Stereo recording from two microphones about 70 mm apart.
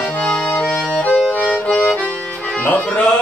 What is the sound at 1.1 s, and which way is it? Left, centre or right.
Accordion, left.